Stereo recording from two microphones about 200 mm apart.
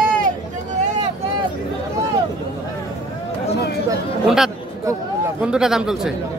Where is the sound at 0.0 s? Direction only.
45° right (ahead or behind).